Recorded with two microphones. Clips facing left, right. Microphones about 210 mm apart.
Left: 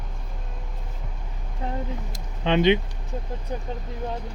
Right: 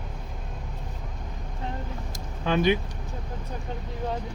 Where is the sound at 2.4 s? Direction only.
25° left (ahead or behind).